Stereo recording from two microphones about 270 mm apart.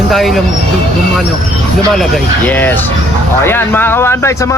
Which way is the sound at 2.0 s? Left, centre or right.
Centre.